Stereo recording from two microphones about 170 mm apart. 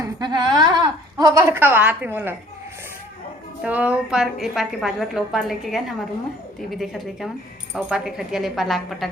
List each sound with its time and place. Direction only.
0.0 s a woman's voice: 25° right (ahead or behind)
3.6 s a woman's voice: 10° right (ahead or behind)